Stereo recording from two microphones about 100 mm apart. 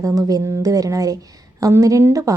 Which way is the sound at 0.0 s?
35° right (ahead or behind).